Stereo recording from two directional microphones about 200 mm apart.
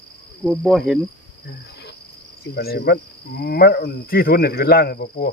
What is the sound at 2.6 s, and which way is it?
Cricket, 50° left (ahead or behind).